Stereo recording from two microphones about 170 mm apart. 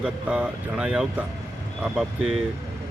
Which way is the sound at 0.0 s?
5° right (ahead or behind).